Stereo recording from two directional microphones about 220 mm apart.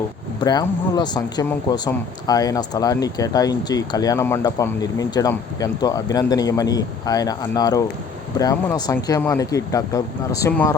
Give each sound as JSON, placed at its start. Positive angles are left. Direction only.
{"t": 0.4, "sound": "speech", "side_deg": 20}